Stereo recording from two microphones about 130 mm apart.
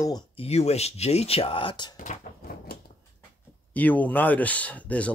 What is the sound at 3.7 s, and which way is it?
Speech, 10° left (ahead or behind).